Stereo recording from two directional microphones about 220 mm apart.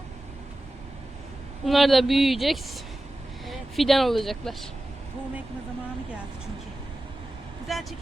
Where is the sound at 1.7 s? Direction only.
Centre (ahead or behind).